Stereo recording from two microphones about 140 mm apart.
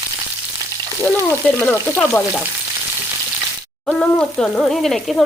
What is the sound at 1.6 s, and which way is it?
Speech, 15° left (ahead or behind).